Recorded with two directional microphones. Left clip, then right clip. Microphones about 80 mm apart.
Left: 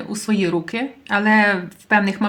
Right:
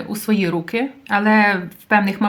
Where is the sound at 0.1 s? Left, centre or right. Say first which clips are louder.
Even; right.